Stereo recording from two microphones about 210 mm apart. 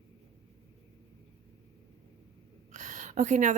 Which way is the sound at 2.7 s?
35° right (ahead or behind).